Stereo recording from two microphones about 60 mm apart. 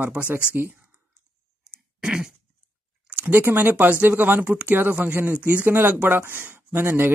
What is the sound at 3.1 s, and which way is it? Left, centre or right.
Speech, right.